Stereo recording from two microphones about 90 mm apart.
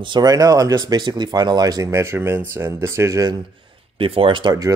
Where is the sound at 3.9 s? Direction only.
90° right.